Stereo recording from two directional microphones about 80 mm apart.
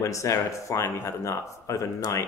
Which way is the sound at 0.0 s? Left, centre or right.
Left.